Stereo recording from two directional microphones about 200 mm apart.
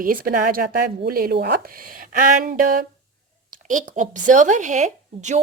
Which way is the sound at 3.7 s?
40° right (ahead or behind).